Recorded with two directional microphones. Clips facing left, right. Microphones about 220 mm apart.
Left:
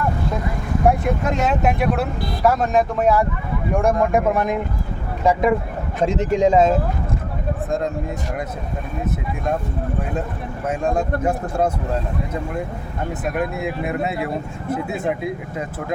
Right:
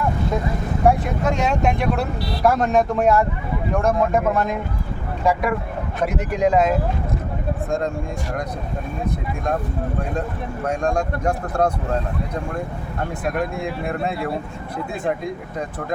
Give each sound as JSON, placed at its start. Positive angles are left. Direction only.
{"t": 1.2, "sound": "speech", "side_deg": 0}
{"t": 10.7, "sound": "speech", "side_deg": 5}
{"t": 13.2, "sound": "speech", "side_deg": 5}